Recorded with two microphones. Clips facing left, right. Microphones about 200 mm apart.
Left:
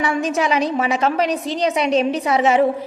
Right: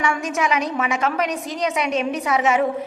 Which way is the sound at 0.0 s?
30° left (ahead or behind).